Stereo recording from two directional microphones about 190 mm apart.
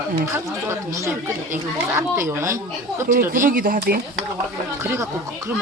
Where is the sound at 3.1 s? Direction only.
45° right (ahead or behind).